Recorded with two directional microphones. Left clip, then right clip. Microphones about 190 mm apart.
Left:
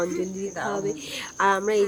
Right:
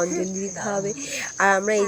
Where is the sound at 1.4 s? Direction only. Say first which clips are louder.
Right 2 dB; 15° right (ahead or behind).